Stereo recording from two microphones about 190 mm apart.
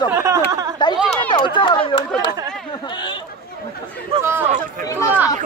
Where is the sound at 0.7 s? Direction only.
25° left (ahead or behind).